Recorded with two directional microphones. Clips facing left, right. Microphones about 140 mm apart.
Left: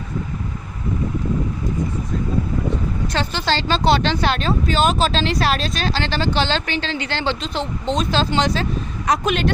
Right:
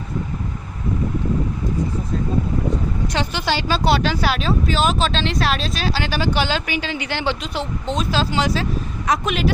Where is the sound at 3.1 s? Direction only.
15° right (ahead or behind).